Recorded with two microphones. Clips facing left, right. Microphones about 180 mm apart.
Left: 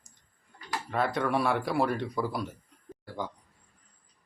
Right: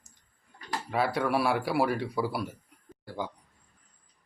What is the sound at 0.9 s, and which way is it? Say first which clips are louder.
Speech: right 1 dB; 10° right (ahead or behind).